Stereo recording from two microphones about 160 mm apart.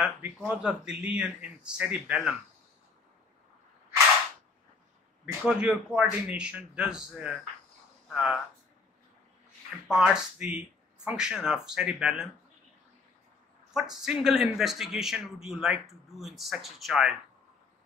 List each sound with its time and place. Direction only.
0.5 s speech: 5° right (ahead or behind)
5.2 s speech: 5° right (ahead or behind)
9.8 s speech: 5° right (ahead or behind)
13.7 s speech: 5° right (ahead or behind)